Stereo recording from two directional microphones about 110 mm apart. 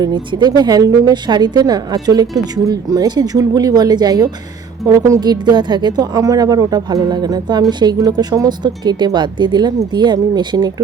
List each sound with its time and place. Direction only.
0.0 s a woman's voice: 45° right (ahead or behind)